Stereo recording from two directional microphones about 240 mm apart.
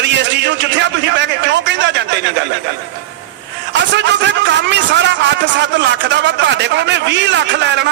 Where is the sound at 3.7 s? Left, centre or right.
Right.